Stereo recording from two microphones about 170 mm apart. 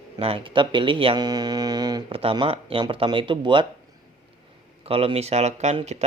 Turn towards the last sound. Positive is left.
turn(degrees=-40)  # may be behind; listen again after turning